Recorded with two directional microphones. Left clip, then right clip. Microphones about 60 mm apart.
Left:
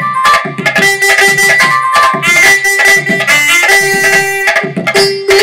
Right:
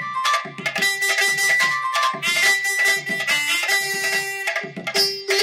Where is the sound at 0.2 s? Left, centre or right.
Left.